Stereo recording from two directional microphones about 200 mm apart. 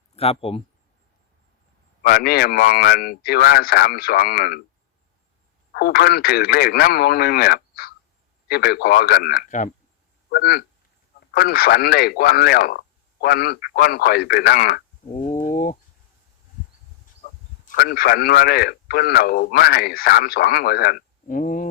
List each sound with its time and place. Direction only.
0.2 s speech: 30° left (ahead or behind)
2.0 s a man's voice: 50° left (ahead or behind)
5.7 s a man's voice: 50° left (ahead or behind)
17.7 s a man's voice: 45° left (ahead or behind)